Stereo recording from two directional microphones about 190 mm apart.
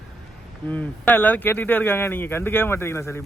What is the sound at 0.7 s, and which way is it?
A man's voice, 10° left (ahead or behind).